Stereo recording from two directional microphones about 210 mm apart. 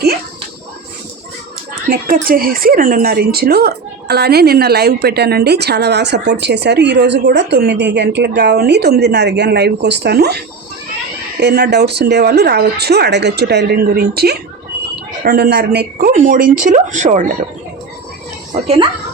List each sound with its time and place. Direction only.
1.9 s speech: 40° right (ahead or behind)
18.5 s speech: 25° right (ahead or behind)